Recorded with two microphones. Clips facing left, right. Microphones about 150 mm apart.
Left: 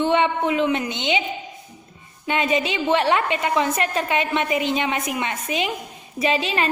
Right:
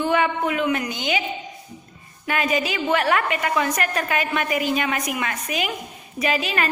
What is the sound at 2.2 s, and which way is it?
A woman's voice, 25° left (ahead or behind).